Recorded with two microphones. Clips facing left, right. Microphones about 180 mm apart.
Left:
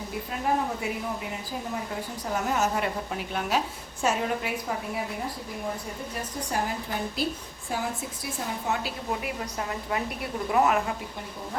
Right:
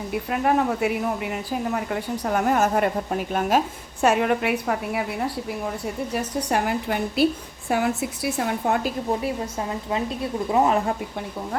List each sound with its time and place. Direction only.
0.3 s a woman's voice: 70° right (ahead or behind); by 3.6 s 50° right (ahead or behind)
4.0 s a woman's voice: 65° right (ahead or behind)
6.5 s a woman's voice: 70° right (ahead or behind)
9.0 s speech: 30° right (ahead or behind)